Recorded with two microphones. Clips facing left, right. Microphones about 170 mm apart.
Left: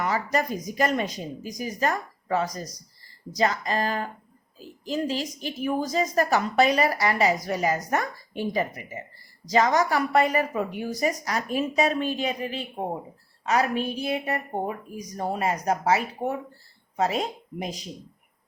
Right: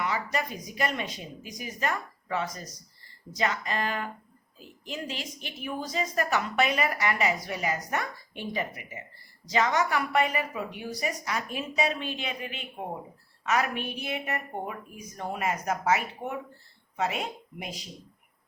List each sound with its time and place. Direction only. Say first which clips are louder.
0.0 s a woman's voice: left 5 dB; 40° left (ahead or behind)